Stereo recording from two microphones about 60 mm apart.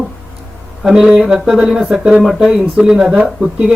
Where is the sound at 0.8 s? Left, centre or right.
Centre.